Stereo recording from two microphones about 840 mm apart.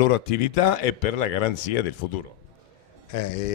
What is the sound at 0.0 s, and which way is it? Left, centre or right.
Speech, left.